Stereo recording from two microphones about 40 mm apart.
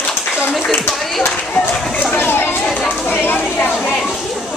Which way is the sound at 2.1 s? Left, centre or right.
Left.